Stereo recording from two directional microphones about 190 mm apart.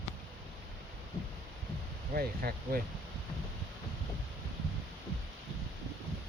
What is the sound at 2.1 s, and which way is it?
Speech, 50° right (ahead or behind).